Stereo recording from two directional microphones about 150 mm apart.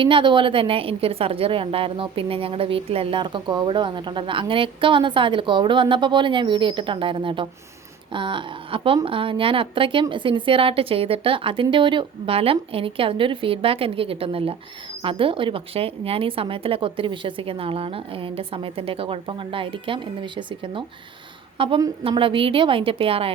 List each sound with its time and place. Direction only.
0.0 s a woman's voice: 35° right (ahead or behind)